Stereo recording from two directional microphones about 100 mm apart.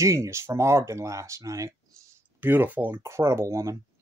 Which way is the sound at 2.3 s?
20° right (ahead or behind).